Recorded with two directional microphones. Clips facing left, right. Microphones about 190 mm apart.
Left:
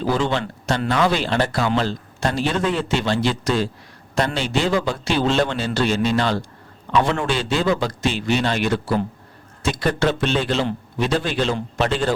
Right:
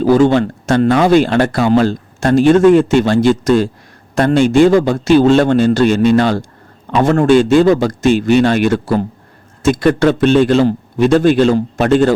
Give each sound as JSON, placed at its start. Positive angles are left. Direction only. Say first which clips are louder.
{"t": 0.0, "sound": "speech", "louder": "right 11 dB", "side_deg": -45}